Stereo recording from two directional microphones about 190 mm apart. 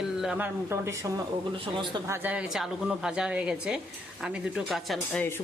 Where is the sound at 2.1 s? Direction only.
5° right (ahead or behind).